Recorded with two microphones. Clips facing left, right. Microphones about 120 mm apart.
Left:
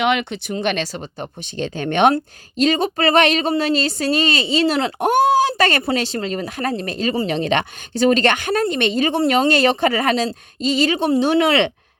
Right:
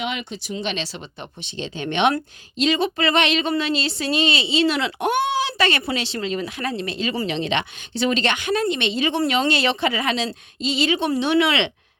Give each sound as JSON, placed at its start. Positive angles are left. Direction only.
{"t": 0.0, "sound": "speech", "side_deg": 70}